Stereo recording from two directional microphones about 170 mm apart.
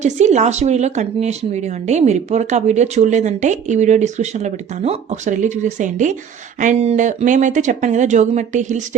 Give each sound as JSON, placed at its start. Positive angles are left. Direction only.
{"t": 0.0, "sound": "speech", "side_deg": -45}